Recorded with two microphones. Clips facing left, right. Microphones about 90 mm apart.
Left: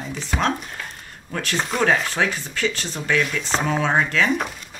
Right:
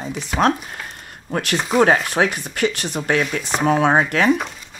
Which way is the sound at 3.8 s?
50° right (ahead or behind).